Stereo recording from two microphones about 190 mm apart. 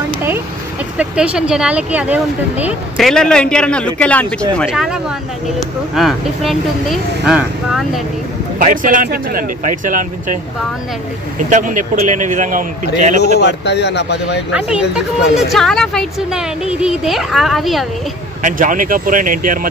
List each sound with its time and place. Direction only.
0.9 s speech: 5° right (ahead or behind)
3.1 s speech: 5° left (ahead or behind)
8.5 s speech: 45° right (ahead or behind)
11.4 s speech: 45° right (ahead or behind)
13.2 s speech: 60° left (ahead or behind)
14.5 s speech: 5° right (ahead or behind)
18.4 s speech: 45° right (ahead or behind)